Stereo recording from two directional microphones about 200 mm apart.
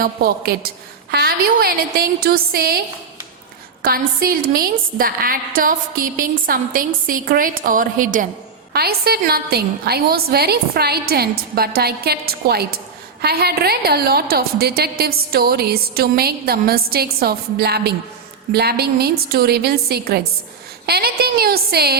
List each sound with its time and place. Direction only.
0.0 s a woman's voice: 45° right (ahead or behind)
3.8 s a woman's voice: 50° right (ahead or behind)